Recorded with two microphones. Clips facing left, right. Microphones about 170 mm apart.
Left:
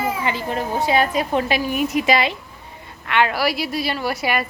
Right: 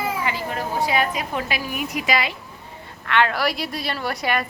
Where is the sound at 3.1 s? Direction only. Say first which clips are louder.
Left 1 dB; 15° left (ahead or behind).